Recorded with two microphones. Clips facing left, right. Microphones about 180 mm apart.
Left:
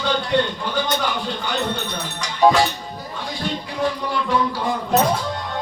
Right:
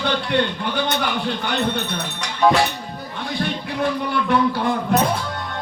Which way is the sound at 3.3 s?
60° right (ahead or behind).